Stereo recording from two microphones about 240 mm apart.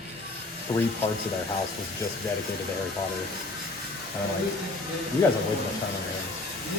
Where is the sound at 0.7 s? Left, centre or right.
Left.